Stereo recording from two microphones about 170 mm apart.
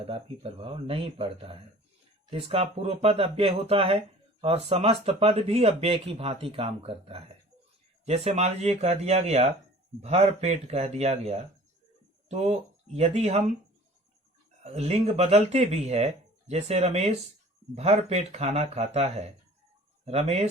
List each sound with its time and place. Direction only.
0.0 s speech: 35° right (ahead or behind)
14.6 s speech: 40° right (ahead or behind)